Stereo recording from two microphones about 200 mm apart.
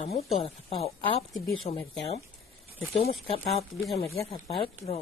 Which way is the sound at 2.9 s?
30° left (ahead or behind).